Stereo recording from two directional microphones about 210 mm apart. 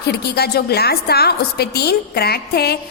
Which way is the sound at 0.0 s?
50° left (ahead or behind).